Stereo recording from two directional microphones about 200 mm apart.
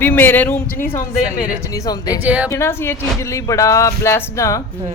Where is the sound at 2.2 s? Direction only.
5° right (ahead or behind).